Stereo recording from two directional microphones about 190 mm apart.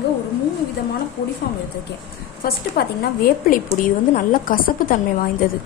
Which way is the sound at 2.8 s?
50° left (ahead or behind).